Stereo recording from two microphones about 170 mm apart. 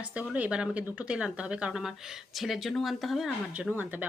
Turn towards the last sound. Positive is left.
turn(degrees=-10)  # may be behind; listen again after turning